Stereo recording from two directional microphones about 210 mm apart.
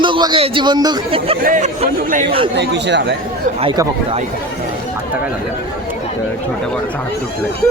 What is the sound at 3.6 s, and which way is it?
Speech, 25° right (ahead or behind).